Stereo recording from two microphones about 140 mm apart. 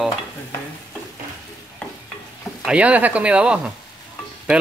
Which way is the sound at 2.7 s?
10° right (ahead or behind).